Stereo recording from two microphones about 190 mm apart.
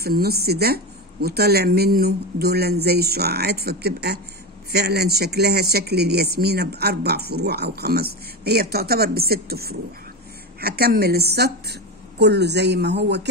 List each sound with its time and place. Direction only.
0.0 s speech: 55° right (ahead or behind)